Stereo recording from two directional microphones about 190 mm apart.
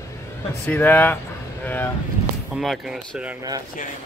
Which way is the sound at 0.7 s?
10° left (ahead or behind).